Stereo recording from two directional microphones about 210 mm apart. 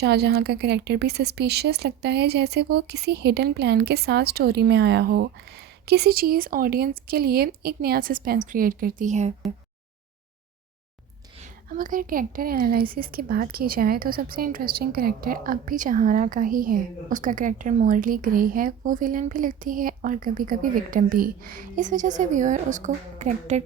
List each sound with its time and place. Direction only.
0.0 s speech: 50° right (ahead or behind); by 9.3 s 35° right (ahead or behind)
11.7 s speech: 40° right (ahead or behind)